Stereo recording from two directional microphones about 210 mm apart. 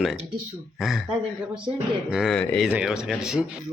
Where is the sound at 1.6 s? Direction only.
20° right (ahead or behind).